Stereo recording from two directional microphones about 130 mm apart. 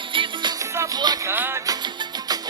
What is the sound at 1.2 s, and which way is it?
Music, 20° right (ahead or behind).